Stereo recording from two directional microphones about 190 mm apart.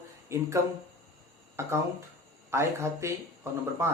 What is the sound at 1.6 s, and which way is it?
Speech, 15° right (ahead or behind).